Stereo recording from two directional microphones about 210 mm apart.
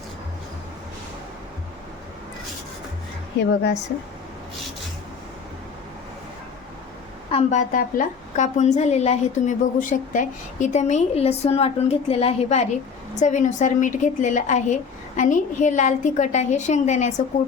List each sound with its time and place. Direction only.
7.3 s a woman's voice: 30° left (ahead or behind)